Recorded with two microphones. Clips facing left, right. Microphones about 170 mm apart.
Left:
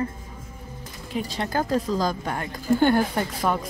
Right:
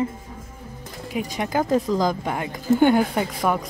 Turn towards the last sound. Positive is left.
turn(degrees=-15)  # may be behind; listen again after turning